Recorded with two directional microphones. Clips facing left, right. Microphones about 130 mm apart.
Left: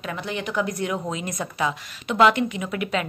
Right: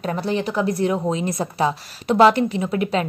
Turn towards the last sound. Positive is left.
turn(degrees=-35)  # may be behind; listen again after turning